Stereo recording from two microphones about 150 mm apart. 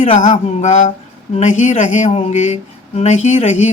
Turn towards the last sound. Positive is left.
turn(degrees=50)  # may be behind; listen again after turning